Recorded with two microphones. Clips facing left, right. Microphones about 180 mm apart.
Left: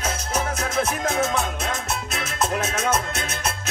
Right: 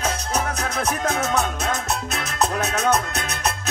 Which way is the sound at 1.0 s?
40° right (ahead or behind).